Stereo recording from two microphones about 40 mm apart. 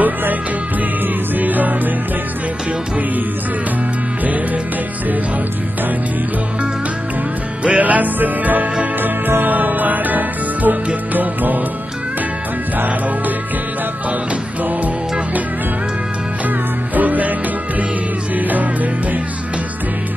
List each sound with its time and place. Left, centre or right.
0.0 s music: right
7.6 s music: right
16.4 s music: right
18.3 s music: right